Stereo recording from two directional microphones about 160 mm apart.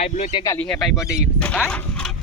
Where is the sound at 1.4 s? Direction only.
10° left (ahead or behind).